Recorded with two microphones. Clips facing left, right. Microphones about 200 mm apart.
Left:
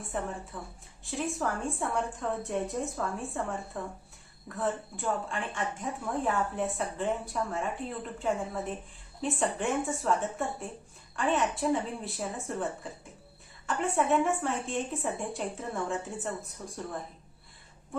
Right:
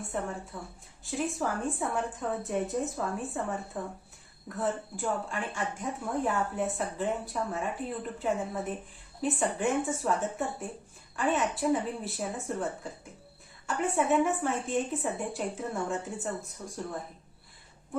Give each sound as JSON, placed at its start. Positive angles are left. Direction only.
{"t": 0.0, "sound": "a woman's voice", "side_deg": 0}